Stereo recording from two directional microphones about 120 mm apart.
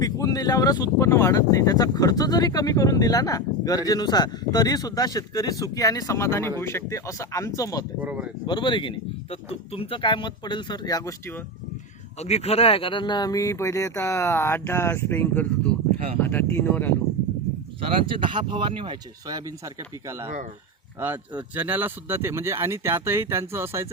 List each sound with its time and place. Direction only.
0.0 s speech: 30° left (ahead or behind)
8.0 s speech: 10° right (ahead or behind)
8.4 s speech: 40° left (ahead or behind)
12.2 s speech: 60° left (ahead or behind); by 16.9 s 15° left (ahead or behind)
17.7 s speech: 50° right (ahead or behind)
20.1 s speech: 20° right (ahead or behind)